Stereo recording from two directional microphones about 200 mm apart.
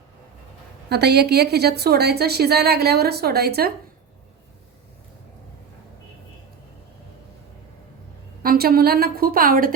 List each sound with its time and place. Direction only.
0.9 s a woman's voice: 55° right (ahead or behind)
8.4 s a woman's voice: 50° right (ahead or behind)